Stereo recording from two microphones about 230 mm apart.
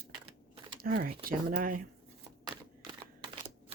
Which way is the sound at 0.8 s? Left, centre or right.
Right.